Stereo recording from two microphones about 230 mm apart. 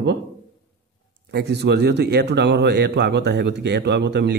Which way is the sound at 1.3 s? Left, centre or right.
Right.